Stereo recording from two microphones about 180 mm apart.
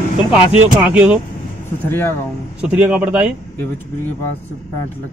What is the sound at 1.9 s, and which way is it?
Speech, 10° left (ahead or behind).